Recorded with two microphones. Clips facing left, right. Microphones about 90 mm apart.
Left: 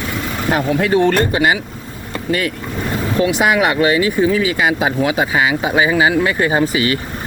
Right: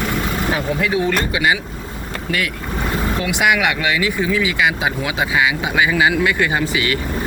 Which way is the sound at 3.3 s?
35° left (ahead or behind).